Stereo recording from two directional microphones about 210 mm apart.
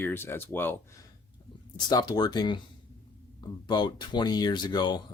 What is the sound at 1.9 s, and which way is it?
Speech, 20° left (ahead or behind).